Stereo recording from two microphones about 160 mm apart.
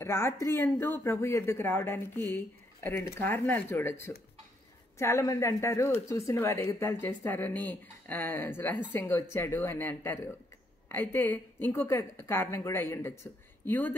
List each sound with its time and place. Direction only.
0.0 s speech: 15° left (ahead or behind)